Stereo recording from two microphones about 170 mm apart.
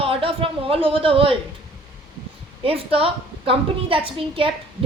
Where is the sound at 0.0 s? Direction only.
30° right (ahead or behind).